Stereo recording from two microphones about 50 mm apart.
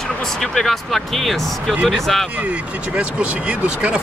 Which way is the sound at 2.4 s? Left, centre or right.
Right.